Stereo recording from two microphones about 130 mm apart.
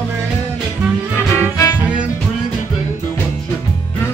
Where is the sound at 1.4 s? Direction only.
25° left (ahead or behind).